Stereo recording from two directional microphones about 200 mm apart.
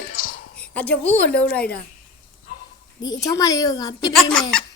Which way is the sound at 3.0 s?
20° left (ahead or behind).